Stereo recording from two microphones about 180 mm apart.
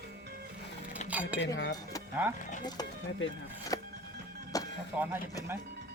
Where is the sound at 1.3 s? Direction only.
85° left.